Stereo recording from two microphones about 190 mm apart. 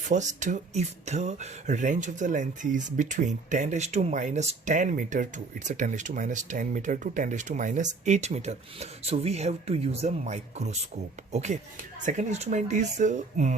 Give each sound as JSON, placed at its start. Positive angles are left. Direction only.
{"t": 0.1, "sound": "speech", "side_deg": -40}